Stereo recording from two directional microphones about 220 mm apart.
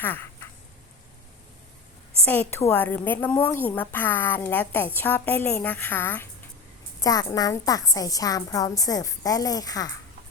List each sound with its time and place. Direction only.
0.0 s a woman's voice: 10° left (ahead or behind)
2.2 s a woman's voice: 5° left (ahead or behind)